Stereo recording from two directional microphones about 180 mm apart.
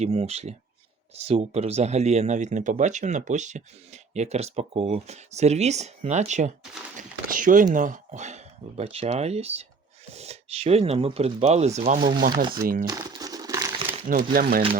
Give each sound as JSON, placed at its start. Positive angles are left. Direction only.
{"t": 0.0, "sound": "speech", "side_deg": -35}
{"t": 12.9, "sound": "crumpling", "side_deg": -20}
{"t": 14.1, "sound": "speech", "side_deg": -55}